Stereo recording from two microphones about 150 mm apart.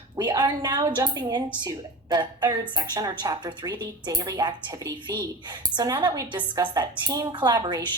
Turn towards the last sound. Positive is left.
turn(degrees=-30)  # may be behind; listen again after turning